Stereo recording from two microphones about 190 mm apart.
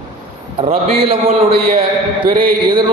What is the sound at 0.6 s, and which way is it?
A man's voice, 30° right (ahead or behind).